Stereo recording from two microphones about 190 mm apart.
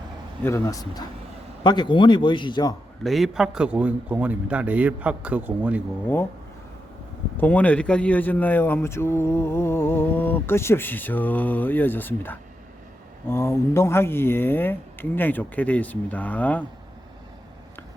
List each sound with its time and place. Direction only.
0.4 s a man's voice: 15° left (ahead or behind)
3.0 s a man's voice: centre (ahead or behind)
7.3 s a man's voice: 10° left (ahead or behind)